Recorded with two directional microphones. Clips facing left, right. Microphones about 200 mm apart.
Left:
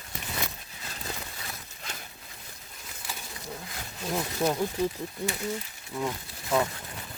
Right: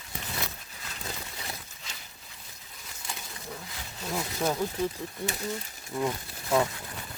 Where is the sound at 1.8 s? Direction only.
55° left (ahead or behind).